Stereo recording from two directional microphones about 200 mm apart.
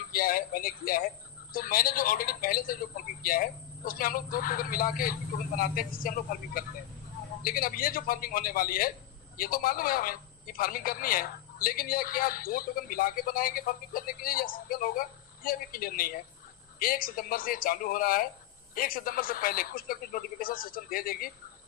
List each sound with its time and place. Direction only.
0.1 s a man's voice: 45° left (ahead or behind)